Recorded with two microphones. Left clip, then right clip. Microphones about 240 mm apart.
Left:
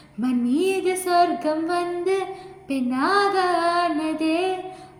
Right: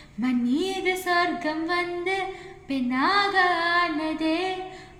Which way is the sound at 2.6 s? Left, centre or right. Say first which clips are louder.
Left 1 dB; right.